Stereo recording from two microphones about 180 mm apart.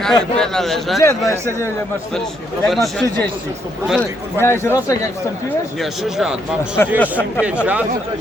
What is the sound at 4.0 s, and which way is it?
A man's voice, 15° left (ahead or behind).